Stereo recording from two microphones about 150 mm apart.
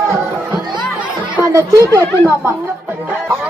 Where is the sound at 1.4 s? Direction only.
20° right (ahead or behind).